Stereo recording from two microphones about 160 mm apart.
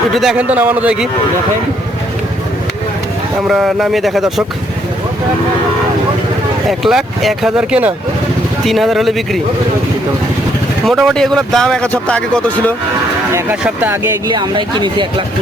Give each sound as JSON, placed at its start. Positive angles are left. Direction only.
{"t": 0.1, "sound": "a man's voice", "side_deg": 0}
{"t": 3.4, "sound": "a man's voice", "side_deg": 0}
{"t": 6.7, "sound": "a man's voice", "side_deg": 0}
{"t": 10.8, "sound": "a man's voice", "side_deg": 0}
{"t": 13.3, "sound": "a man's voice", "side_deg": -10}
{"t": 14.3, "sound": "speech", "side_deg": -30}